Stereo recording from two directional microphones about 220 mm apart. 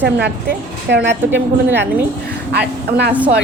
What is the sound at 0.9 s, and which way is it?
Speech, 50° right (ahead or behind).